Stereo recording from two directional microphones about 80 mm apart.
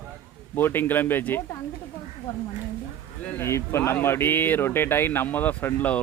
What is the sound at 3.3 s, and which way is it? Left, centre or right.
Speech, left.